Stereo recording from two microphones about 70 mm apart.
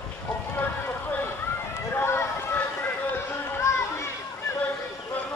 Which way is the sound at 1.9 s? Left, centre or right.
Left.